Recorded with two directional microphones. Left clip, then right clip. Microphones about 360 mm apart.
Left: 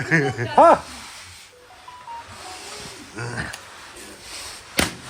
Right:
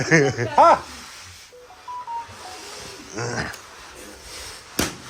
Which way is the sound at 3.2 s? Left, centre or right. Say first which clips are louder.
Right 3 dB; centre.